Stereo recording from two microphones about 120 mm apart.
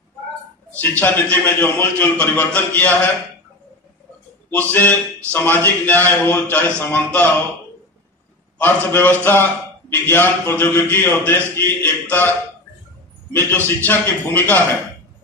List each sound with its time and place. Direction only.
0.7 s a man's voice: 15° left (ahead or behind)
4.5 s a man's voice: 15° left (ahead or behind)
8.5 s a man's voice: 15° left (ahead or behind)
13.8 s a man's voice: 15° left (ahead or behind)